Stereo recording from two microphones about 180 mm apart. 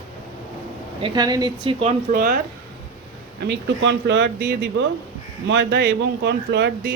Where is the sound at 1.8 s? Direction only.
35° right (ahead or behind).